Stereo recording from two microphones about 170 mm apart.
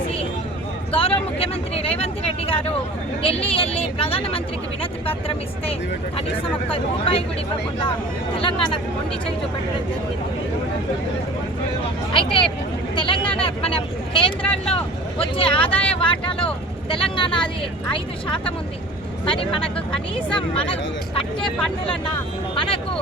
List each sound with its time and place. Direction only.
0.9 s speech: 35° left (ahead or behind)
6.7 s speech: 35° left (ahead or behind)
8.4 s speech: 30° left (ahead or behind)
12.1 s speech: 30° left (ahead or behind)
13.0 s a sound: 30° left (ahead or behind)
13.4 s speech: 35° left (ahead or behind)
14.4 s speech: 5° left (ahead or behind)
15.2 s speech: 30° left (ahead or behind)
19.2 s speech: 30° left (ahead or behind)